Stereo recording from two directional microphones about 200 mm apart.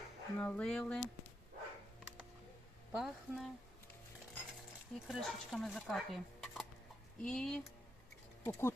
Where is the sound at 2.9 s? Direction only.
Centre (ahead or behind).